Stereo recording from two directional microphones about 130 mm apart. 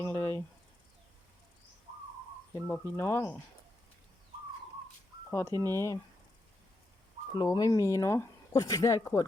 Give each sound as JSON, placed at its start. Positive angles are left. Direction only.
{"t": 0.0, "sound": "a sound", "side_deg": 15}
{"t": 2.5, "sound": "speech", "side_deg": 10}
{"t": 5.3, "sound": "speech", "side_deg": 20}
{"t": 7.3, "sound": "speech", "side_deg": 30}